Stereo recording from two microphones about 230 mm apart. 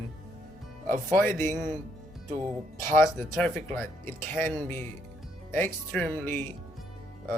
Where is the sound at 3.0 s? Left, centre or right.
Centre.